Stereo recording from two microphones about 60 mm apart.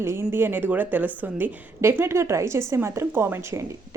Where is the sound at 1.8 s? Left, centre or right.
Right.